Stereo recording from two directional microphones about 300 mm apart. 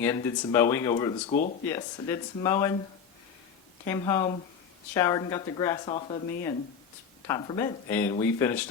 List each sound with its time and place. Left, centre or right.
0.0 s speech: centre
1.3 s speech: left
1.6 s speech: centre
3.8 s speech: centre